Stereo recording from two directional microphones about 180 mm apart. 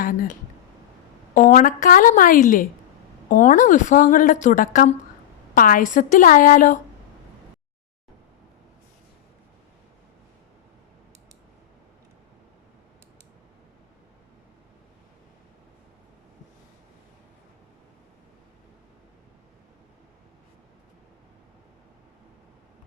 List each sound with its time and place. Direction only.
0.0 s a woman's voice: 50° left (ahead or behind)